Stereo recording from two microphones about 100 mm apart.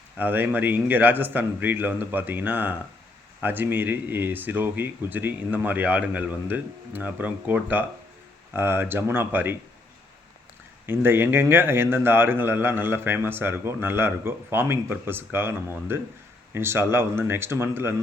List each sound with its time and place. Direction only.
0.2 s a man's voice: 20° right (ahead or behind)
10.8 s a man's voice: 25° right (ahead or behind)